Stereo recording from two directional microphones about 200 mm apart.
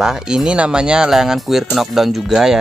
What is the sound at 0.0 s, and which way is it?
Speech, 5° right (ahead or behind).